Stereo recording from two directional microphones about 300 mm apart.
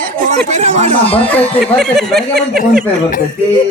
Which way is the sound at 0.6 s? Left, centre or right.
Right.